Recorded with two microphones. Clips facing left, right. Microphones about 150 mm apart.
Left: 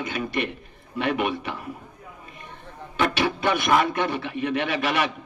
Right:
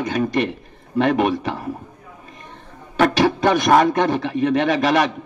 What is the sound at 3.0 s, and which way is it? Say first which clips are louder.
A man's voice: right 7 dB; 40° right (ahead or behind).